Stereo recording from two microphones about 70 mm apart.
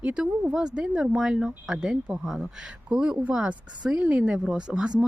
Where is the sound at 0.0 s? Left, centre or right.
Centre.